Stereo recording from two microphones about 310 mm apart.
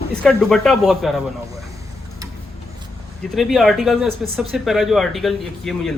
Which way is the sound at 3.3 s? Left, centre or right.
Centre.